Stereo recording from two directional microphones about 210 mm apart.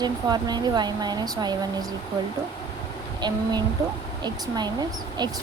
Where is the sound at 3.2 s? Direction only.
20° right (ahead or behind).